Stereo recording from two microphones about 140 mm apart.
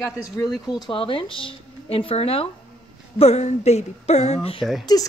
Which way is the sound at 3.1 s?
50° left (ahead or behind).